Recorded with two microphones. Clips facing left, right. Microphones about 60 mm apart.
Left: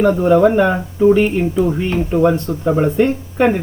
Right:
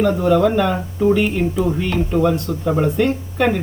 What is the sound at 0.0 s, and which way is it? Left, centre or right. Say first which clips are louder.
Speech: left 3 dB; left.